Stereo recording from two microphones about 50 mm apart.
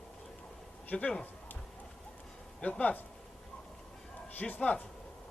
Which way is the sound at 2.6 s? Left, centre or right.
Centre.